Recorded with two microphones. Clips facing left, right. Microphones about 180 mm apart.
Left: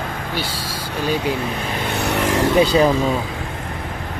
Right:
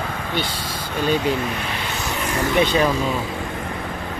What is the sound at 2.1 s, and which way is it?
Vehicle, 75° left (ahead or behind).